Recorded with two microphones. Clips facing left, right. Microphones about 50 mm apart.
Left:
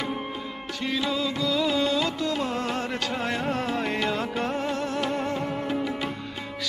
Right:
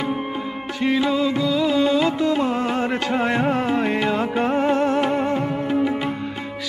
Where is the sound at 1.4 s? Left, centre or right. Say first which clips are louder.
Right 3 dB; centre.